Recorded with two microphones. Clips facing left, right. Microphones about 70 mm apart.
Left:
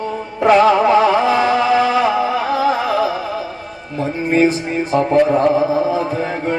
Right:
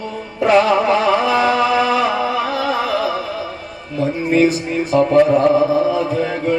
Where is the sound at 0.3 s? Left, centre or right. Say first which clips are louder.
Left 2 dB; left.